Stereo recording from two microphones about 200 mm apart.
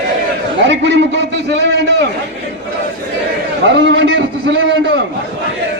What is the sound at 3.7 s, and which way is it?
Speech, 60° right (ahead or behind).